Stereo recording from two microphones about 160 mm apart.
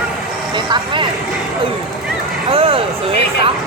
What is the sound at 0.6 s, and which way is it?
Speech, 30° right (ahead or behind).